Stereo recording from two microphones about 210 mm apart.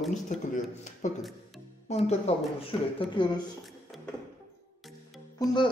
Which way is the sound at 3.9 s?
Centre (ahead or behind).